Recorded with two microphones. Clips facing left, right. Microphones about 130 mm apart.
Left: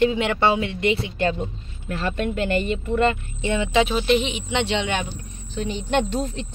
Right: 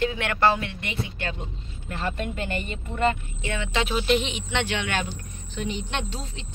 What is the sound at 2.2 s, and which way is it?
Speech, 90° left.